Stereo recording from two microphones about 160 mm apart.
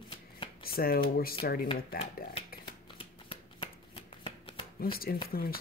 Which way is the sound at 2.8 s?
35° left (ahead or behind).